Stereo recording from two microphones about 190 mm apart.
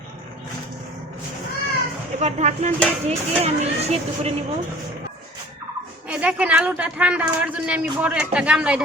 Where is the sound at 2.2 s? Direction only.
40° right (ahead or behind).